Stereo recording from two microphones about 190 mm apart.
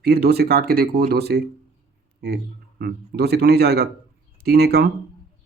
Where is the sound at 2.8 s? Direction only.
55° right (ahead or behind).